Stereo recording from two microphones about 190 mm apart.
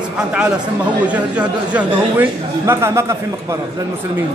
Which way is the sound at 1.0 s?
5° right (ahead or behind).